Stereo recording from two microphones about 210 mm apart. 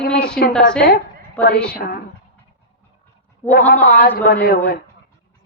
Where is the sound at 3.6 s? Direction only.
5° left (ahead or behind).